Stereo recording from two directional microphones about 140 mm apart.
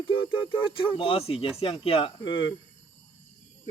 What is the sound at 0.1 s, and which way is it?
Speech, 35° left (ahead or behind).